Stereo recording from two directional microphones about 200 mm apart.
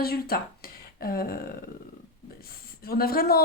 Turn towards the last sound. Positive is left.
turn(degrees=50)  # may be behind; listen again after turning